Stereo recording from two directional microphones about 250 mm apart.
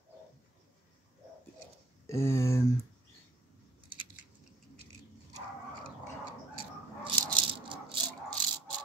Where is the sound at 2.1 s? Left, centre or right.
Centre.